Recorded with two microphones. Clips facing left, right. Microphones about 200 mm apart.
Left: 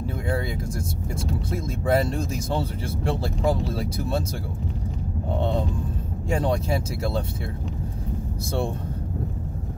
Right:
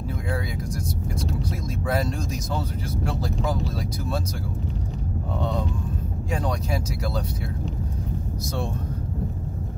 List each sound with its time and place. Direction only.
1.2 s speech: 25° left (ahead or behind)
5.4 s speech: 25° left (ahead or behind)